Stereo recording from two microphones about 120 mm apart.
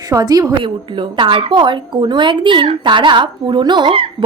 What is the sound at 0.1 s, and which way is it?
Speech, 30° right (ahead or behind).